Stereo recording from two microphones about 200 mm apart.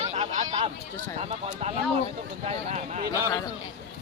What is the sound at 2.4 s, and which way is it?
Speech, 35° right (ahead or behind).